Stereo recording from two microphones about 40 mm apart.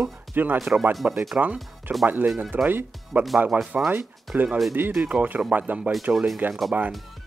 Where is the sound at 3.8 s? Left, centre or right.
Right.